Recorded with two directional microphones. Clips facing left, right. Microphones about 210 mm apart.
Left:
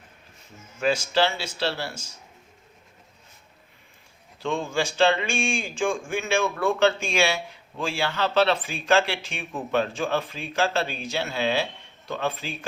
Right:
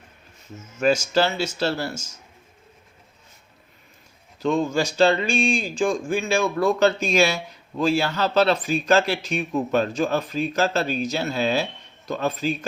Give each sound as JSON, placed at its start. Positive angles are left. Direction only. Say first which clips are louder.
{"t": 0.8, "sound": "speech", "louder": "right 3 dB", "side_deg": -45}
{"t": 4.4, "sound": "speech", "louder": "right 5 dB", "side_deg": -40}